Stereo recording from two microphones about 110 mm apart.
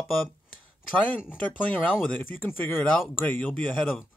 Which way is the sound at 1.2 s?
15° left (ahead or behind).